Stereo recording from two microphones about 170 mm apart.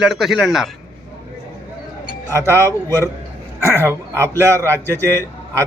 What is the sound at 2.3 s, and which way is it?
A man's voice, 15° right (ahead or behind).